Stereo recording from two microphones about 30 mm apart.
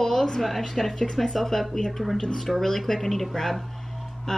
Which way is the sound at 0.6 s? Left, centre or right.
Centre.